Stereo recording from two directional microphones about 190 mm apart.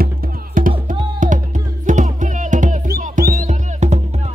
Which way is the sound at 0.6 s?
45° right (ahead or behind).